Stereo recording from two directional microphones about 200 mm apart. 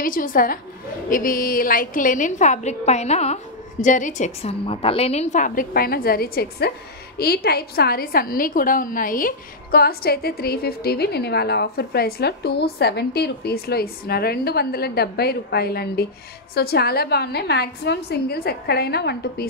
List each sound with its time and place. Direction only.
0.0 s a woman's voice: 45° left (ahead or behind)